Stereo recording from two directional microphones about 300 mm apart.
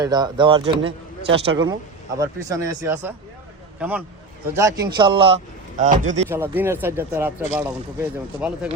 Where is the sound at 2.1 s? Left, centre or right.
Centre.